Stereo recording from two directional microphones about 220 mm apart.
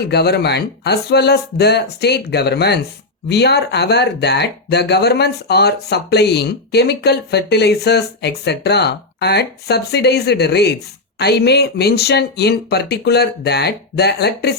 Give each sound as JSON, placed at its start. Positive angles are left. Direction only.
{"t": 0.0, "sound": "speech", "side_deg": 50}